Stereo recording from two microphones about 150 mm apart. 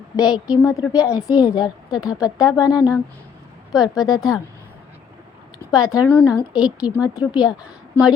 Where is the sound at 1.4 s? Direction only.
25° left (ahead or behind).